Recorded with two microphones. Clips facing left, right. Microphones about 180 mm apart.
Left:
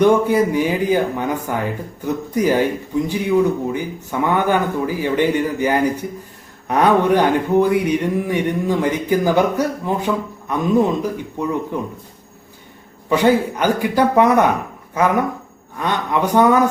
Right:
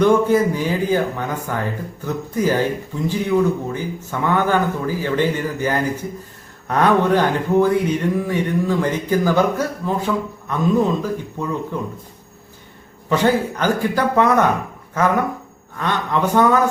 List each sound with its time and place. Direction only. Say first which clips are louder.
0.0 s speech: left 1 dB; 15° left (ahead or behind)
13.1 s speech: left 2 dB; 15° left (ahead or behind)